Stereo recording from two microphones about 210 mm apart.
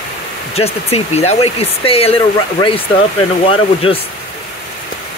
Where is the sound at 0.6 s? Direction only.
30° left (ahead or behind).